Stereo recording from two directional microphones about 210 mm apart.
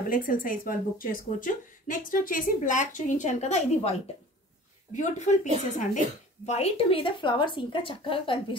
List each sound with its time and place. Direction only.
0.1 s a woman's voice: 40° left (ahead or behind); by 8.5 s 25° left (ahead or behind)